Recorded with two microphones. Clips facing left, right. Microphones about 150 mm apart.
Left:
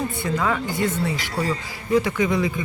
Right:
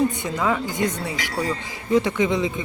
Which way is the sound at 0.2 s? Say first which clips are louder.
Even; 15° right (ahead or behind).